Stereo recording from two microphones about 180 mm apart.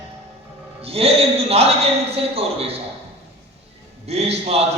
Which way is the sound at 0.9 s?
35° right (ahead or behind).